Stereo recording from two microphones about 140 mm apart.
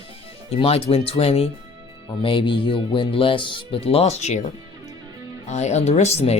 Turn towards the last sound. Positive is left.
turn(degrees=50)  # may be behind; listen again after turning